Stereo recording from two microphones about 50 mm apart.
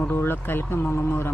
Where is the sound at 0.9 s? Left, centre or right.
Left.